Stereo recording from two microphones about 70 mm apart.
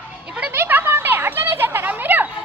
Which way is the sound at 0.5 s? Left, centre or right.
Right.